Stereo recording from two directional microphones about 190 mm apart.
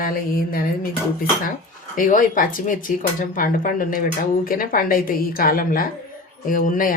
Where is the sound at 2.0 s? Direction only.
45° left (ahead or behind).